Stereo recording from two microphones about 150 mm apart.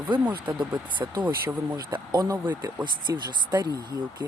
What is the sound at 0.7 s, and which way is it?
Speech, 30° right (ahead or behind).